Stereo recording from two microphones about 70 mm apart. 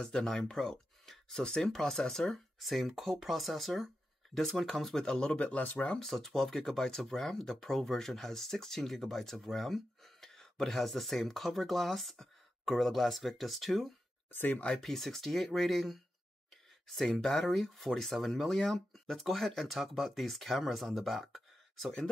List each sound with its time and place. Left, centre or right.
0.0 s speech: centre
5.9 s speech: centre
14.3 s speech: left
14.6 s speech: centre
21.8 s speech: centre